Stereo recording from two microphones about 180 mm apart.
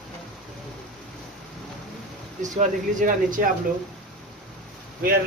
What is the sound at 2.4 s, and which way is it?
Speech, 45° right (ahead or behind).